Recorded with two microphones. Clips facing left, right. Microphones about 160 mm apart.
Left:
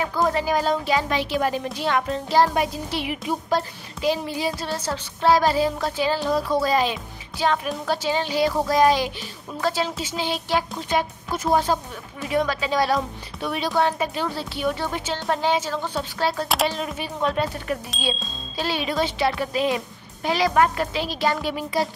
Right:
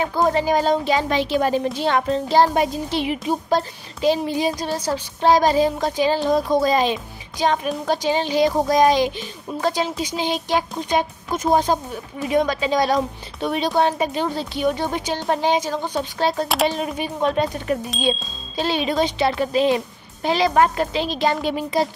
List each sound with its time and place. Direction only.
0.0 s speech: 25° right (ahead or behind)